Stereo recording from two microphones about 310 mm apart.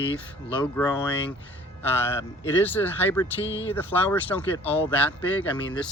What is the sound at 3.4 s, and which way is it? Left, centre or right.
Speech, left.